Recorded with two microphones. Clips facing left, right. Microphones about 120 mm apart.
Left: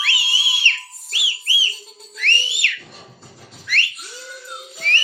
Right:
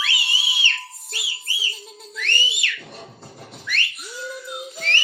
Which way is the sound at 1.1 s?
90° left.